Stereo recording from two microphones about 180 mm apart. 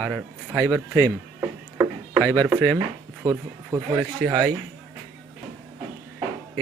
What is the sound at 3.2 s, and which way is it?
Speech, 15° right (ahead or behind).